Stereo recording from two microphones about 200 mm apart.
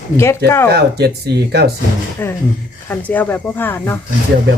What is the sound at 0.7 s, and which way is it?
Speech, 55° right (ahead or behind).